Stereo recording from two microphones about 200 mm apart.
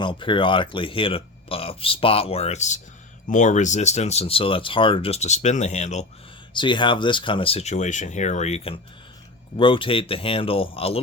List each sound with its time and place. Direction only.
0.0 s speech: 25° left (ahead or behind)
6.5 s speech: 25° left (ahead or behind)